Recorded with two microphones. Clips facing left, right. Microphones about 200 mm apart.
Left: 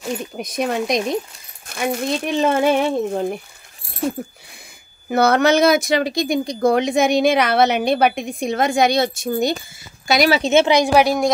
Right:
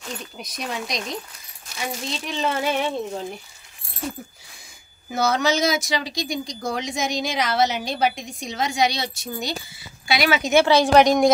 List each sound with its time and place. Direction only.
0.4 s speech: 55° left (ahead or behind)
5.1 s a woman's voice: 60° left (ahead or behind); by 10.5 s 35° left (ahead or behind)
10.5 s a woman's voice: 20° left (ahead or behind)